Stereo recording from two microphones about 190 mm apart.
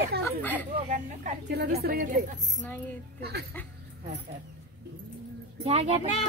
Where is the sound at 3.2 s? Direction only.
60° right (ahead or behind).